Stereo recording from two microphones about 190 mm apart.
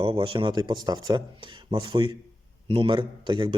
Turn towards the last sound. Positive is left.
turn(degrees=-25)  # may be behind; listen again after turning